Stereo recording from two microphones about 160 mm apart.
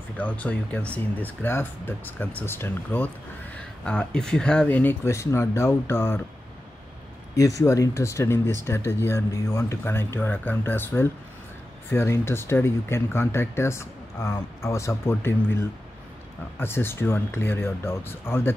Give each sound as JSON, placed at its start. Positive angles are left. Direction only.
{"t": 0.2, "sound": "speech", "side_deg": 10}
{"t": 7.3, "sound": "speech", "side_deg": 20}